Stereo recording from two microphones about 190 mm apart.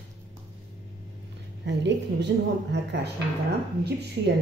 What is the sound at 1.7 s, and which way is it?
A woman's voice, 65° right (ahead or behind).